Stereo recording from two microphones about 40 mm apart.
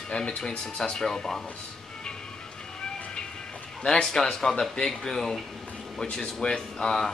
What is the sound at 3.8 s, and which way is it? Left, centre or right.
Speech, centre.